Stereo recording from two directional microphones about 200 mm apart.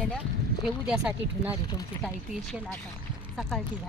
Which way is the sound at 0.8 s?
5° right (ahead or behind).